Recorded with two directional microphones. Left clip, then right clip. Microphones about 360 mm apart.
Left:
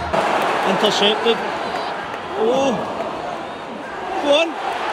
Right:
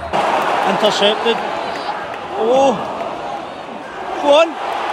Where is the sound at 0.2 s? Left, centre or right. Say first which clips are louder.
Right 3 dB; centre.